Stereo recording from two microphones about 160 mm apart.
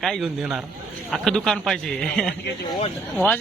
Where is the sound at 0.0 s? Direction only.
Centre (ahead or behind).